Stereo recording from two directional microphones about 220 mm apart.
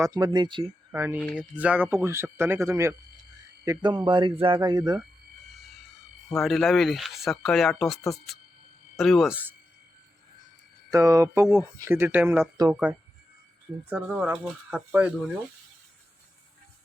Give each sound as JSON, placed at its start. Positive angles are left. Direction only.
{"t": 0.0, "sound": "speech", "side_deg": -20}
{"t": 0.9, "sound": "speech", "side_deg": -10}
{"t": 6.4, "sound": "speech", "side_deg": 0}
{"t": 9.0, "sound": "speech", "side_deg": 0}
{"t": 10.9, "sound": "speech", "side_deg": -15}